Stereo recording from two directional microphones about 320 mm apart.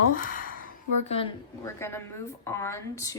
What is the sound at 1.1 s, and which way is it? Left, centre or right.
A woman's voice, centre.